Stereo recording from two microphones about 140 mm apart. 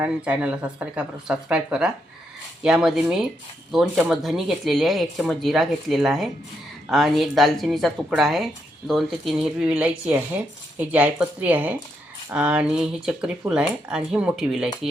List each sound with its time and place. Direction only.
0.0 s speech: 10° right (ahead or behind)